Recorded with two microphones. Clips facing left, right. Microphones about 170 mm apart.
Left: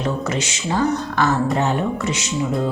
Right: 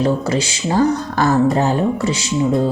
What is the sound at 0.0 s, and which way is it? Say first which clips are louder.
Speech: right 5 dB; 35° right (ahead or behind).